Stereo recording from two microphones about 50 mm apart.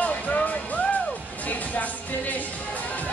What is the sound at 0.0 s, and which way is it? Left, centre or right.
Music, left.